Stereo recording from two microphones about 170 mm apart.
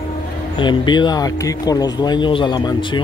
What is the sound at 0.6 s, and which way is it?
Speech, 25° left (ahead or behind).